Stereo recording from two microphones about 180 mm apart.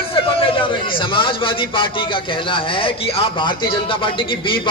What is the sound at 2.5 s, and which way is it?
Speech, 30° left (ahead or behind).